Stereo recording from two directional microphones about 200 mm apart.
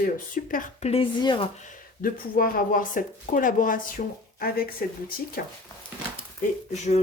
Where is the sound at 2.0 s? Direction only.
45° left (ahead or behind).